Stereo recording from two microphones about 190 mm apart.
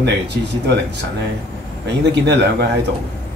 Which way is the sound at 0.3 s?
55° right (ahead or behind).